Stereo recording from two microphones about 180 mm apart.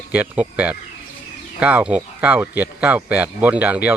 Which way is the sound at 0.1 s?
10° right (ahead or behind).